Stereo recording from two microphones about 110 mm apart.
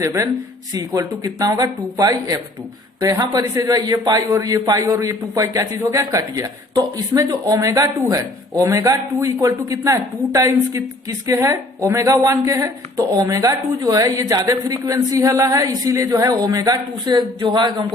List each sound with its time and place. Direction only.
0.0 s a man's voice: 30° right (ahead or behind)